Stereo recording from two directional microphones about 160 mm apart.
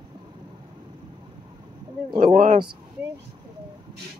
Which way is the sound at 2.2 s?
55° right (ahead or behind).